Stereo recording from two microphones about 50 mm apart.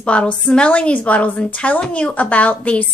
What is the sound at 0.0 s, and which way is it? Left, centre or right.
A woman's voice, left.